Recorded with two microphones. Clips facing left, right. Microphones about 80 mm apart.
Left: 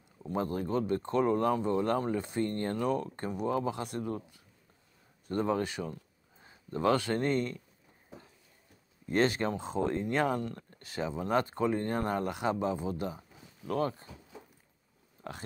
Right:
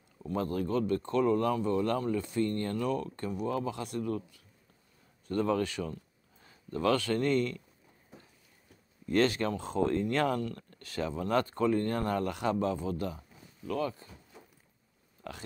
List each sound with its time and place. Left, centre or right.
0.3 s speech: left
9.0 s speech: left
13.7 s speech: left
15.2 s speech: left